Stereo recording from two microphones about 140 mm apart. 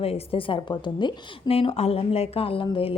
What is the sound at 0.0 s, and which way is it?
A woman's voice, 45° left (ahead or behind).